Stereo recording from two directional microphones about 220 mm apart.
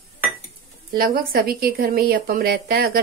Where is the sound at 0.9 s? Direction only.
40° right (ahead or behind).